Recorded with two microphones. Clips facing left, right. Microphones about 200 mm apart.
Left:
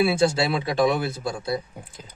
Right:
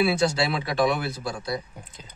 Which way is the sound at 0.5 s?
25° left (ahead or behind).